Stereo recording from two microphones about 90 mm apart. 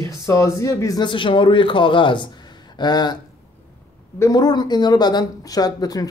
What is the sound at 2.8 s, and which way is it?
Speech, 50° left (ahead or behind).